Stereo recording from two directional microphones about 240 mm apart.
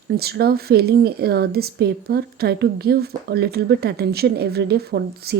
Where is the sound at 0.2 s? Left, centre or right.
Right.